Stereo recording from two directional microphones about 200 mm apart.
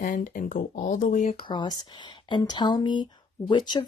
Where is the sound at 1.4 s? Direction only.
20° left (ahead or behind).